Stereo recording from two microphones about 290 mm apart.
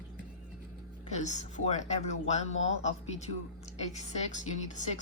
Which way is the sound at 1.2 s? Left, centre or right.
Left.